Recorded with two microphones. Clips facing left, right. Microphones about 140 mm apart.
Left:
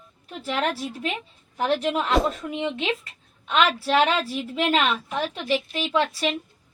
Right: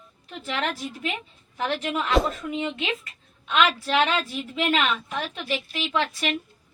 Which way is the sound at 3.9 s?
35° left (ahead or behind).